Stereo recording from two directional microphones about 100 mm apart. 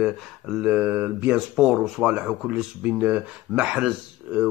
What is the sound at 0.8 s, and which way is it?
Speech, 15° right (ahead or behind).